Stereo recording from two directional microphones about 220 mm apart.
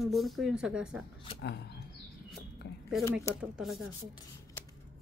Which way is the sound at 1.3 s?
50° left (ahead or behind).